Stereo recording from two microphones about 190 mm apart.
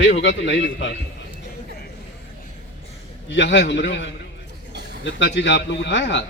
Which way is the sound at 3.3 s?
65° left (ahead or behind).